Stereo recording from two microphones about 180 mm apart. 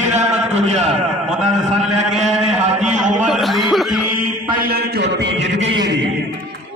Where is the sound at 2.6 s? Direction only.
40° right (ahead or behind).